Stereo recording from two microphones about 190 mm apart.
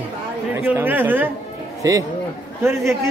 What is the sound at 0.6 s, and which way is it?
A man's voice, 10° right (ahead or behind).